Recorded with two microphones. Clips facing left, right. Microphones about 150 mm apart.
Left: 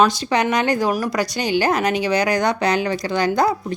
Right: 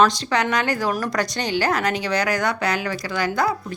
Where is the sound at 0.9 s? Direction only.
5° left (ahead or behind).